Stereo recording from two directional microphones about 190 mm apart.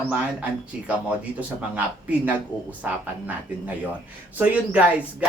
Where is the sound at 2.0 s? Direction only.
5° right (ahead or behind).